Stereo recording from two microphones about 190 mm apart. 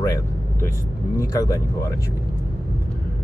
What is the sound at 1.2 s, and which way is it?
Speech, 15° left (ahead or behind).